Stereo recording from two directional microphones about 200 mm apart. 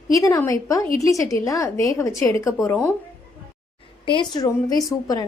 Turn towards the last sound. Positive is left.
turn(degrees=20)  # may be behind; listen again after turning